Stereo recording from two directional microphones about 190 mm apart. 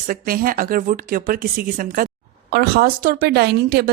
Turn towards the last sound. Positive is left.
turn(degrees=-55)  # may be behind; listen again after turning